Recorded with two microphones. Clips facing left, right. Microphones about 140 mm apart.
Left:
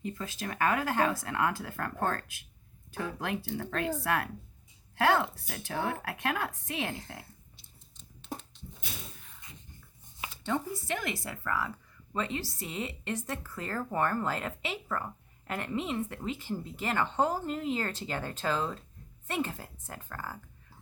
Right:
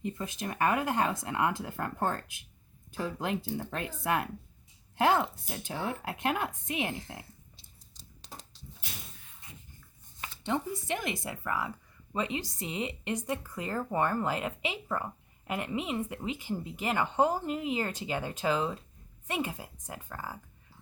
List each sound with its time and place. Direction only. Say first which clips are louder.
0.0 s speech: right 1 dB; 20° right (ahead or behind)
10.4 s speech: right 1 dB; 20° right (ahead or behind)